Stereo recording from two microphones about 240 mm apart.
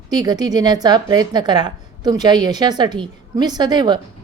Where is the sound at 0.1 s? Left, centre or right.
Centre.